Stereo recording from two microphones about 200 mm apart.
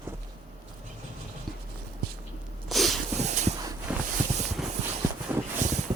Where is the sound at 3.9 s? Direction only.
5° right (ahead or behind).